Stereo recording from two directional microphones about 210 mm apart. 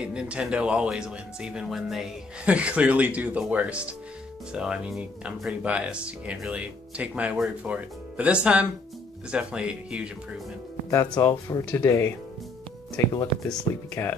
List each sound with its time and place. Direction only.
0.0 s speech: 5° right (ahead or behind)
11.1 s speech: 15° left (ahead or behind)